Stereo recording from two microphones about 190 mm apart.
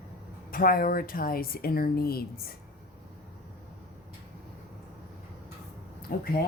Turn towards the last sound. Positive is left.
turn(degrees=50)  # may be behind; listen again after turning